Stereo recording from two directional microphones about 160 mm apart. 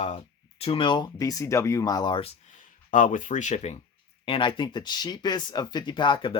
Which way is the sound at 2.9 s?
55° left (ahead or behind).